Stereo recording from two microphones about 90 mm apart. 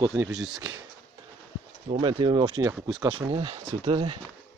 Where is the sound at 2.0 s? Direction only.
70° right (ahead or behind).